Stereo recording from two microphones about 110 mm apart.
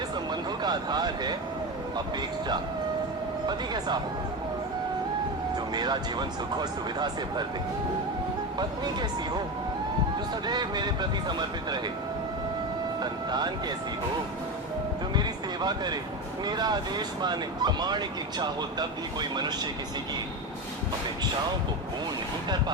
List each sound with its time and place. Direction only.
0.6 s speech: 40° right (ahead or behind)
3.4 s speech: 40° right (ahead or behind)
5.7 s speech: 40° right (ahead or behind)
8.5 s speech: 40° right (ahead or behind)
10.4 s speech: 40° right (ahead or behind)
13.0 s music: 40° right (ahead or behind)
15.1 s speech: 40° right (ahead or behind)